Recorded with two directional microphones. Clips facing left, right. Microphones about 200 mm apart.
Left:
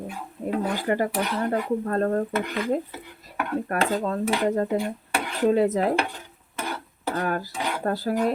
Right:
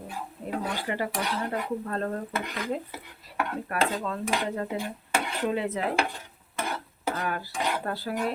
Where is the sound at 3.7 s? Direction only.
40° left (ahead or behind).